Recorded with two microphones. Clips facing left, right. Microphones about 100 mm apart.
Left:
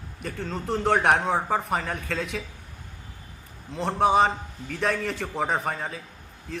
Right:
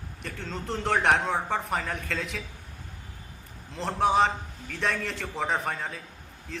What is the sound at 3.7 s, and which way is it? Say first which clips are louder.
A man's voice: left 3 dB; centre (ahead or behind).